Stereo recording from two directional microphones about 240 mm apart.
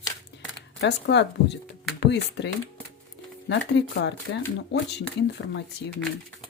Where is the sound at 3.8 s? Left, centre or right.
Left.